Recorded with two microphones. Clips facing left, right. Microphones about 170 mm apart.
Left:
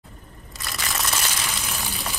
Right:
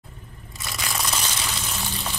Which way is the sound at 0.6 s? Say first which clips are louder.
Even; centre (ahead or behind).